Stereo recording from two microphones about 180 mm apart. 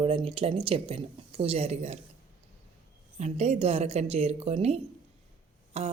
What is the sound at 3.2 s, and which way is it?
Speech, 40° right (ahead or behind).